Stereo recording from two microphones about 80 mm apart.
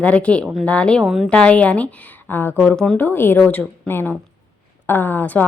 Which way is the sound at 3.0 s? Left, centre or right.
Left.